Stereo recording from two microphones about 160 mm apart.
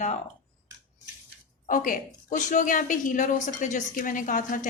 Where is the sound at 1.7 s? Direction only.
55° left (ahead or behind).